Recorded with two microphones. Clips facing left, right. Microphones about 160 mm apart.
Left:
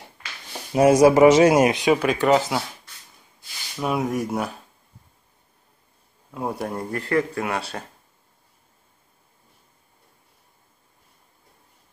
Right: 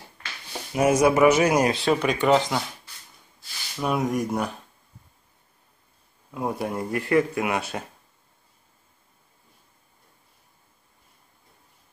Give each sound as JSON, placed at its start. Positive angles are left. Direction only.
{"t": 0.7, "sound": "speech", "side_deg": 30}
{"t": 2.0, "sound": "speech", "side_deg": 0}
{"t": 3.7, "sound": "speech", "side_deg": 5}
{"t": 6.3, "sound": "speech", "side_deg": 0}
{"t": 6.9, "sound": "speech", "side_deg": -15}